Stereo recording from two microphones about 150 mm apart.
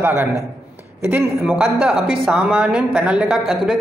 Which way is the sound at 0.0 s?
15° right (ahead or behind).